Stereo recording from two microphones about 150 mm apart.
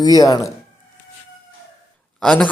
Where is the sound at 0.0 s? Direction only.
25° left (ahead or behind).